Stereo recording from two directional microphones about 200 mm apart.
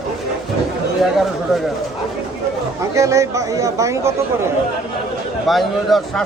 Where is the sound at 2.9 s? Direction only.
15° right (ahead or behind).